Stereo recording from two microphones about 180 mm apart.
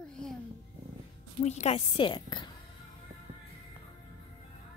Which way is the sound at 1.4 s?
40° left (ahead or behind).